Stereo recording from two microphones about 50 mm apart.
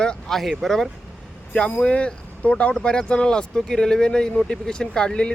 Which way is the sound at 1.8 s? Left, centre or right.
Left.